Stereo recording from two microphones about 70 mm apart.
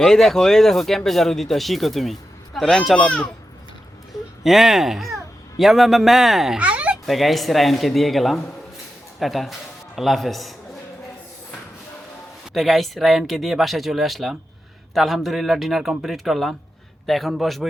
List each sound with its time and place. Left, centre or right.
0.0 s speech: centre
4.4 s a man's voice: centre
6.6 s a sound: centre
7.0 s a man's voice: centre
12.5 s speech: centre